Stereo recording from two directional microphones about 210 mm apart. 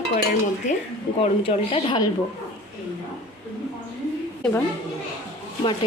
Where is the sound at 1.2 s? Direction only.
25° left (ahead or behind).